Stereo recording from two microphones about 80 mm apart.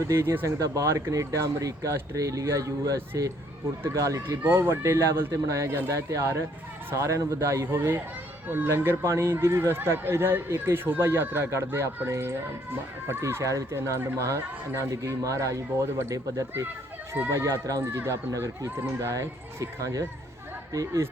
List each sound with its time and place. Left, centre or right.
0.0 s speech: right